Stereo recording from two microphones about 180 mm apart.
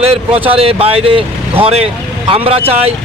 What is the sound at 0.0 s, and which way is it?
Speech, 30° right (ahead or behind).